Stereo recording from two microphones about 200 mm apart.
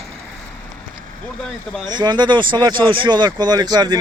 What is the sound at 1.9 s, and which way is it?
Speech, 20° right (ahead or behind).